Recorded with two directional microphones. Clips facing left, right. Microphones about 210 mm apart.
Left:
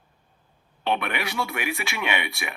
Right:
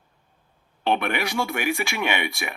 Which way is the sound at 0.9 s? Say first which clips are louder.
Right 3 dB; 45° right (ahead or behind).